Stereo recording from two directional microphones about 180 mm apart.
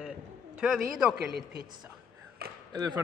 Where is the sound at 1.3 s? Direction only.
60° right (ahead or behind).